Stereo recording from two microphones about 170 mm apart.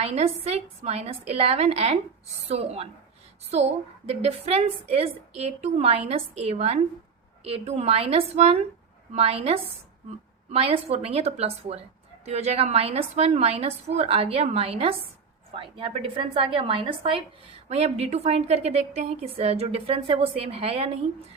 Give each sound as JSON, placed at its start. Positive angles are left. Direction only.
{"t": 0.0, "sound": "a woman's voice", "side_deg": -40}